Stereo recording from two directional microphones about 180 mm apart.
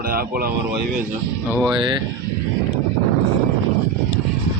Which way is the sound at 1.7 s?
25° right (ahead or behind).